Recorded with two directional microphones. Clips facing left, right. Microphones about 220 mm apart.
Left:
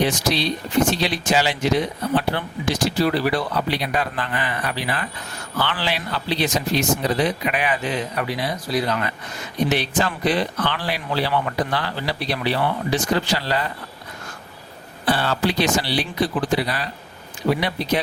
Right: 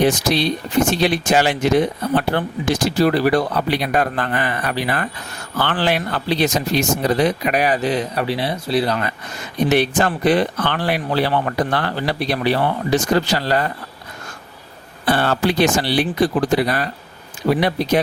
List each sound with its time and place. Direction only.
0.0 s speech: 50° right (ahead or behind)
9.6 s speech: 55° right (ahead or behind)
15.1 s speech: 55° right (ahead or behind)